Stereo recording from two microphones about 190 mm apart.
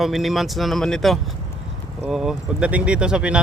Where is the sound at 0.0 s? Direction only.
Centre (ahead or behind).